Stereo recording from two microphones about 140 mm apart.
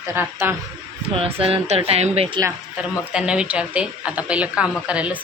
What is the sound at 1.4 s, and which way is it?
A woman's voice, 45° right (ahead or behind).